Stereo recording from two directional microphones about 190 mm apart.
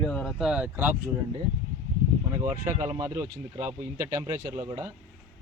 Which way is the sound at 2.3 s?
15° right (ahead or behind).